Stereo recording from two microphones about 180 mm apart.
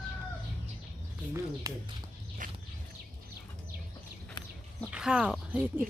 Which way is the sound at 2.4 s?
50° right (ahead or behind).